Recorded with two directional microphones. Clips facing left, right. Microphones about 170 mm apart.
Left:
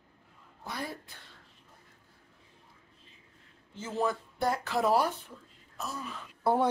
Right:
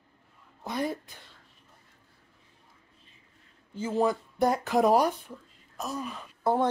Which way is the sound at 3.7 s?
15° right (ahead or behind).